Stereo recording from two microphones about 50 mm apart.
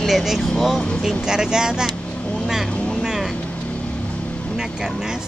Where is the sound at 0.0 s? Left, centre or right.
Centre.